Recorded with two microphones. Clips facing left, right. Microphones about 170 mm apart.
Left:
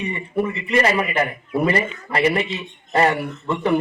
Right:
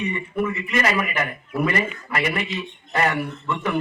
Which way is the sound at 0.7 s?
30° left (ahead or behind).